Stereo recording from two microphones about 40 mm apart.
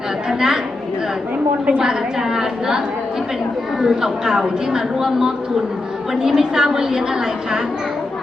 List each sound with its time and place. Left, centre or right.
0.3 s a woman's voice: centre
1.8 s a woman's voice: centre